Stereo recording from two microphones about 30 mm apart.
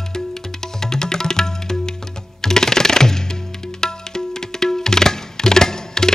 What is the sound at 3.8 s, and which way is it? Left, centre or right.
Tabla, left.